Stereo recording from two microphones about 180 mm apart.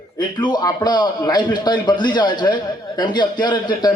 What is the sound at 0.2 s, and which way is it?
A man's voice, 25° left (ahead or behind).